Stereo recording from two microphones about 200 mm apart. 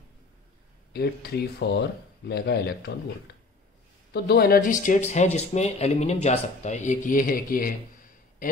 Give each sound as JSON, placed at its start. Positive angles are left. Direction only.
{"t": 0.9, "sound": "speech", "side_deg": 55}
{"t": 4.1, "sound": "speech", "side_deg": 50}
{"t": 8.4, "sound": "a sound", "side_deg": 45}